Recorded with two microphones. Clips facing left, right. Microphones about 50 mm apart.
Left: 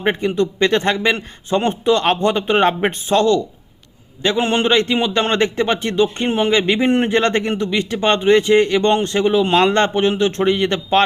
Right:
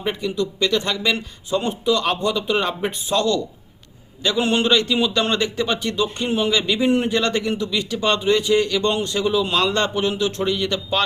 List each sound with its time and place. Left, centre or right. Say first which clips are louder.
0.0 s a man's voice: left 6 dB; left